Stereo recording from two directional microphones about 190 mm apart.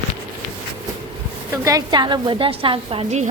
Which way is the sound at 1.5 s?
15° right (ahead or behind).